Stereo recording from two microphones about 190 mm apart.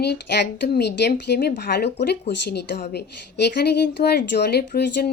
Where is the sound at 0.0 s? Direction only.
60° left (ahead or behind).